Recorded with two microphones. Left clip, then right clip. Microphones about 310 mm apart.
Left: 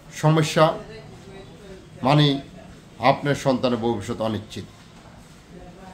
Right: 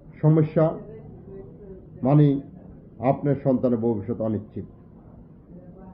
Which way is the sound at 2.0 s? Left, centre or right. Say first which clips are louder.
Left 2 dB; centre.